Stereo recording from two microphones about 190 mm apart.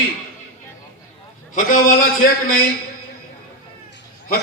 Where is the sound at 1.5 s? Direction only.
45° left (ahead or behind).